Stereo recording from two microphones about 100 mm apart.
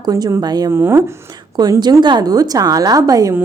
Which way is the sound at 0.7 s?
20° right (ahead or behind).